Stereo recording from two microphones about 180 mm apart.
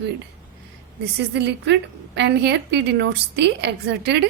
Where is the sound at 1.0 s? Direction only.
70° right (ahead or behind).